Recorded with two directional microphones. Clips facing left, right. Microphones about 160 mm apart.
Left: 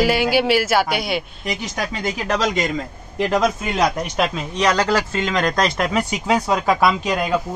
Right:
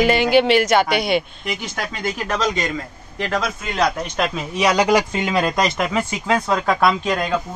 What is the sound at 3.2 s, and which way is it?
Speech, 20° left (ahead or behind).